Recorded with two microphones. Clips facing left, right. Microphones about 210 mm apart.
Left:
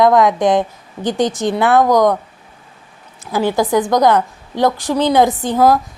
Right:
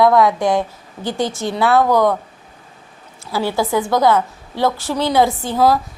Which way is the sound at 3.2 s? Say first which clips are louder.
Left 3 dB; 15° left (ahead or behind).